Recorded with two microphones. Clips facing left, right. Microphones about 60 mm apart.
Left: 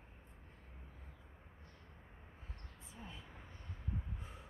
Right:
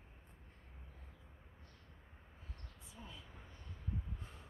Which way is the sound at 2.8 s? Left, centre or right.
Left.